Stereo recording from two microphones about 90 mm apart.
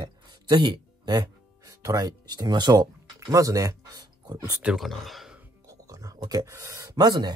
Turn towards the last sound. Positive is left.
turn(degrees=-50)  # may be behind; listen again after turning